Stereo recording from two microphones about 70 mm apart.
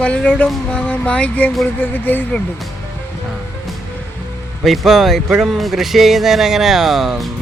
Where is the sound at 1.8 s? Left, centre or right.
Left.